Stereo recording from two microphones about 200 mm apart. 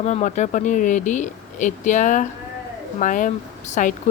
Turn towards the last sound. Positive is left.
turn(degrees=40)  # may be behind; listen again after turning